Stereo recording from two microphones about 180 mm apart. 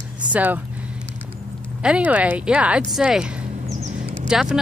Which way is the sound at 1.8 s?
5° right (ahead or behind).